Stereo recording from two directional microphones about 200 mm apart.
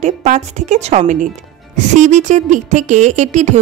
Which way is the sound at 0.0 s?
35° right (ahead or behind).